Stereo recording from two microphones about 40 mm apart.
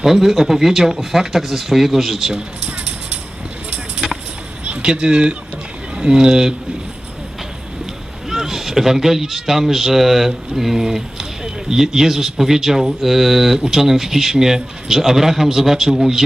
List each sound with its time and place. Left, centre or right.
0.0 s speech: centre
2.6 s a sound: centre
4.6 s speech: right
8.3 s speech: centre